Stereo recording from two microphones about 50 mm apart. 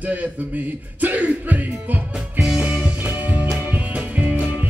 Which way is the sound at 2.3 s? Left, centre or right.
Right.